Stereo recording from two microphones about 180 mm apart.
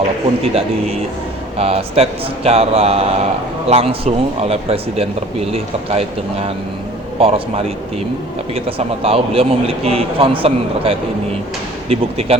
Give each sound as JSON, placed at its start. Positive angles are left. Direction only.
{"t": 1.5, "sound": "a man's voice", "side_deg": -35}
{"t": 9.0, "sound": "a man's voice", "side_deg": -30}